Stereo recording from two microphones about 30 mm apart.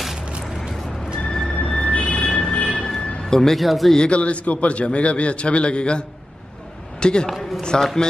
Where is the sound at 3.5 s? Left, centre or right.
Centre.